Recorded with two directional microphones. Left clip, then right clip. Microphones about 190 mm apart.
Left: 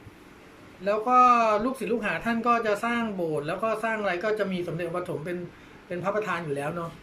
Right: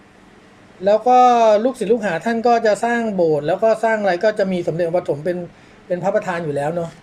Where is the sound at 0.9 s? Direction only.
25° right (ahead or behind).